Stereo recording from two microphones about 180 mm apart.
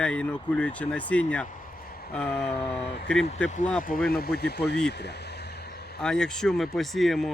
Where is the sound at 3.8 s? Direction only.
55° left (ahead or behind).